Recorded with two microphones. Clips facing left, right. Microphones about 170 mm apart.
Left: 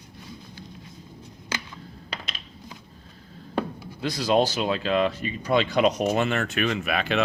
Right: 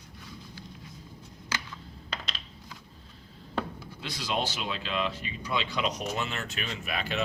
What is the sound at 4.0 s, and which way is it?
Speech, 40° left (ahead or behind).